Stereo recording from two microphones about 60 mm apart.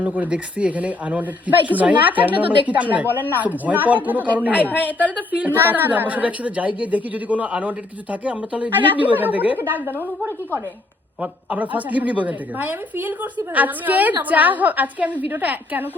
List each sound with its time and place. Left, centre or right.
0.0 s a woman's voice: right
4.5 s a woman's voice: left
4.9 s a woman's voice: right
11.2 s a woman's voice: right